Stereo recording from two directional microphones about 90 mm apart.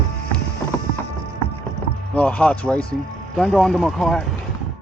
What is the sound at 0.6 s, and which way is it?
Music, 45° left (ahead or behind).